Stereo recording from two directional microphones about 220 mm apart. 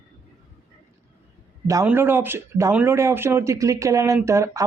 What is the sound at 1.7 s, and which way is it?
Speech, 10° right (ahead or behind).